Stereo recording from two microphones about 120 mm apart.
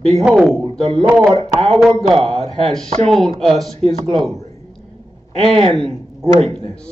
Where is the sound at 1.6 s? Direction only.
5° left (ahead or behind).